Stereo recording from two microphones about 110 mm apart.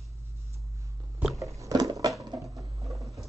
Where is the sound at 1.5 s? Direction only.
30° right (ahead or behind).